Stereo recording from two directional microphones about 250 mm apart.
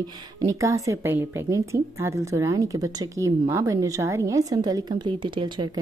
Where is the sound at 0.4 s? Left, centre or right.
Centre.